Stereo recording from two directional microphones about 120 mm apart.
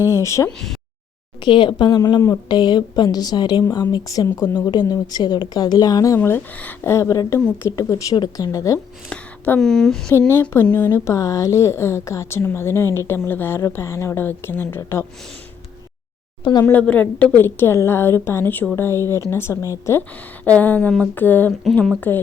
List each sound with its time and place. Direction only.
0.1 s a woman's voice: 25° left (ahead or behind)
1.4 s a woman's voice: 45° left (ahead or behind)
6.1 s a woman's voice: 15° left (ahead or behind)
9.0 s a sound: 15° left (ahead or behind)
9.6 s speech: 5° left (ahead or behind)
10.5 s a woman's voice: 20° left (ahead or behind)
16.4 s speech: 35° left (ahead or behind)
16.6 s a woman's voice: 10° left (ahead or behind)
20.6 s a woman's voice: 15° left (ahead or behind)